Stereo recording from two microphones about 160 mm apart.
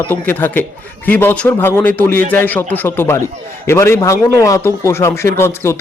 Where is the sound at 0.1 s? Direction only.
10° left (ahead or behind).